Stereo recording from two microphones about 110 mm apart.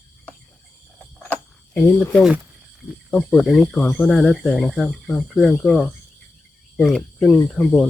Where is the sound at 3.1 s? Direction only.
5° left (ahead or behind).